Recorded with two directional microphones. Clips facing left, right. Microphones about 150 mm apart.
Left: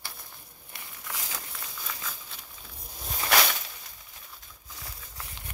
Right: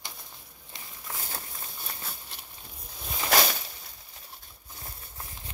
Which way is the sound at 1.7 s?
90° left.